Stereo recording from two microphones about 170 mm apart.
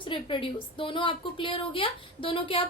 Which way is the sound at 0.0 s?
30° left (ahead or behind).